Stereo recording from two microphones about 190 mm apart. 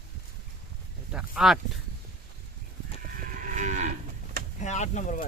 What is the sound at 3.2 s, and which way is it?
Moo, 40° right (ahead or behind).